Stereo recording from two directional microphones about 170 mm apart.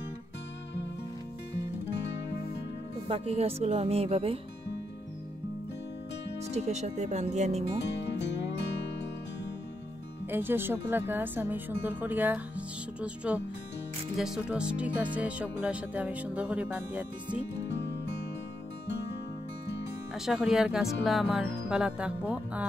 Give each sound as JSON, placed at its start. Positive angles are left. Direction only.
{"t": 3.1, "sound": "speech", "side_deg": -35}
{"t": 6.4, "sound": "speech", "side_deg": -40}
{"t": 10.3, "sound": "speech", "side_deg": -10}
{"t": 20.2, "sound": "speech", "side_deg": -5}